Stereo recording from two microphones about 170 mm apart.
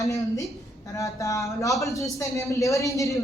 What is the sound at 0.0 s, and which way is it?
A man's voice, 20° left (ahead or behind).